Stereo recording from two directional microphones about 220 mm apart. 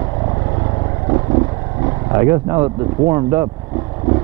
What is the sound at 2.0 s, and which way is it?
Speech, 15° right (ahead or behind).